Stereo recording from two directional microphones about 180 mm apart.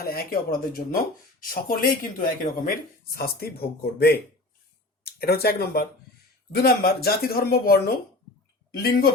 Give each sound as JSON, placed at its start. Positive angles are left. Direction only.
{"t": 0.0, "sound": "speech", "side_deg": 55}